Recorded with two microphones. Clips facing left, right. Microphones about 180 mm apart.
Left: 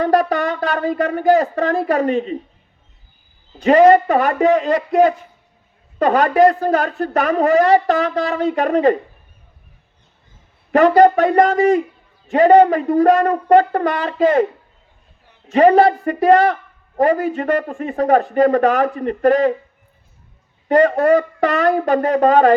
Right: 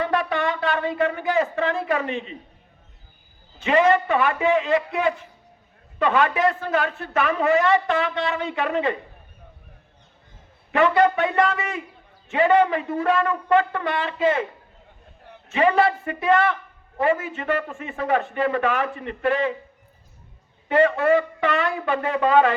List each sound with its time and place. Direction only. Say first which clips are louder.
0.0 s speech: left 7 dB; 40° left (ahead or behind)
3.6 s a woman's voice: left 8 dB; 40° left (ahead or behind)
10.7 s a woman's voice: left 7 dB; 40° left (ahead or behind)
15.5 s a woman's voice: left 8 dB; 40° left (ahead or behind)
20.7 s a woman's voice: left 5 dB; 40° left (ahead or behind)